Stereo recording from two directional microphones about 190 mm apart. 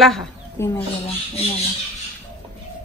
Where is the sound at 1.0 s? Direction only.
30° left (ahead or behind).